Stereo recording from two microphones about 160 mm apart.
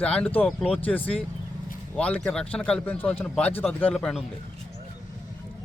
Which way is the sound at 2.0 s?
10° left (ahead or behind).